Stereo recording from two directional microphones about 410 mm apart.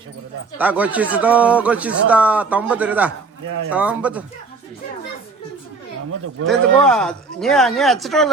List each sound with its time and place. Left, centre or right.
0.6 s speech: centre
6.1 s speech: right
6.5 s speech: centre